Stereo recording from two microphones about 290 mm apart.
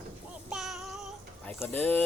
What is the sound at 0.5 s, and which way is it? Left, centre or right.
Child singing, centre.